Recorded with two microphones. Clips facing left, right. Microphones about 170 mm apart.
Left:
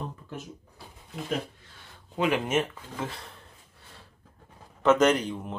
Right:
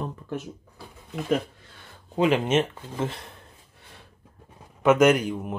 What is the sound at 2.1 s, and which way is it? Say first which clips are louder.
Speech: right 4 dB; 25° right (ahead or behind).